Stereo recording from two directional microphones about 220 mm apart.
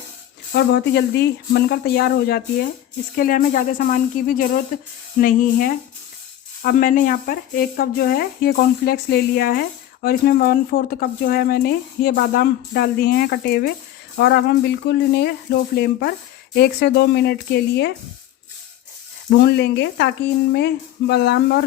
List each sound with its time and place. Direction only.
0.5 s speech: 50° left (ahead or behind)
19.5 s speech: 50° left (ahead or behind)